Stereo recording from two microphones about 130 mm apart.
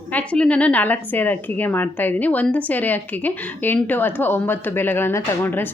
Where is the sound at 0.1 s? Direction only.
10° left (ahead or behind).